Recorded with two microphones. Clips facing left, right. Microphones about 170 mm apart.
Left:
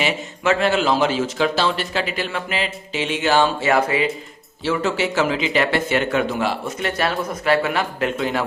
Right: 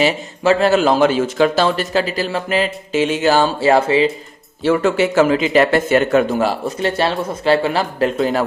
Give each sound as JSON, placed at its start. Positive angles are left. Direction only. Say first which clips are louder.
{"t": 0.0, "sound": "a man's voice", "louder": "right 5 dB", "side_deg": -40}
{"t": 4.6, "sound": "a man's voice", "louder": "right 6 dB", "side_deg": -50}